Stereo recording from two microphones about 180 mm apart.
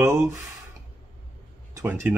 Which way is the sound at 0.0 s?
15° right (ahead or behind).